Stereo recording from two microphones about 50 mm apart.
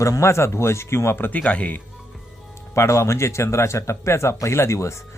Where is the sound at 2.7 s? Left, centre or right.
Left.